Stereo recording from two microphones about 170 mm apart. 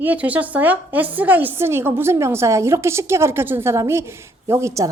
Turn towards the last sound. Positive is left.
turn(degrees=-15)  # may be behind; listen again after turning